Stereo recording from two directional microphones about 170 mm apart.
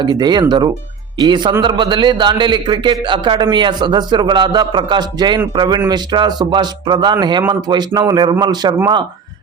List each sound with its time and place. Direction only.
0.0 s a man's voice: 25° right (ahead or behind)